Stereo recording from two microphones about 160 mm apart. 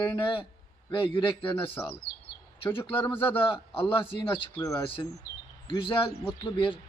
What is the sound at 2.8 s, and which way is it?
A man's voice, 35° left (ahead or behind).